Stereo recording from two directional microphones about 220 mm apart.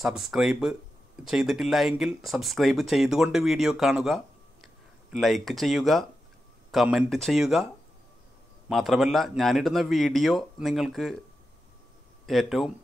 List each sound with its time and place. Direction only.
0.0 s speech: centre (ahead or behind)
8.6 s speech: centre (ahead or behind)
12.3 s speech: centre (ahead or behind)